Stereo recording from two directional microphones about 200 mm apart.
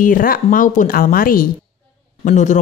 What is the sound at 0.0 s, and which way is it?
Speech, 45° left (ahead or behind).